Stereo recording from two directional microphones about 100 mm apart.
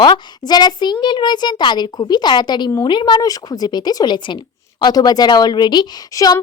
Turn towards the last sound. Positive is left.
turn(degrees=45)  # may be behind; listen again after turning